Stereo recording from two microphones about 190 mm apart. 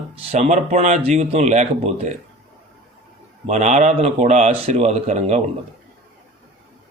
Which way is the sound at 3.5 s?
35° right (ahead or behind).